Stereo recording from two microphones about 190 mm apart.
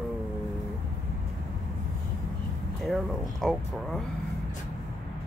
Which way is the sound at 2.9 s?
Centre (ahead or behind).